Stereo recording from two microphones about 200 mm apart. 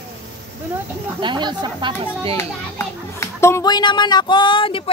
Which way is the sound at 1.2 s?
25° right (ahead or behind).